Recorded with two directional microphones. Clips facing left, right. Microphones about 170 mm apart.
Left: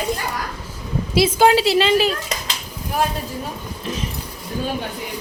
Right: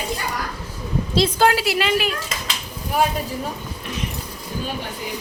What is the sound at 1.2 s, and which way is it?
Speech, 10° left (ahead or behind).